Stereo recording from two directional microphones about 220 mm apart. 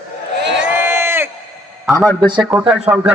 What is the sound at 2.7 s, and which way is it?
Speech, 5° right (ahead or behind).